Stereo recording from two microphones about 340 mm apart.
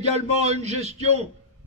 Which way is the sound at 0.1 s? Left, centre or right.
Centre.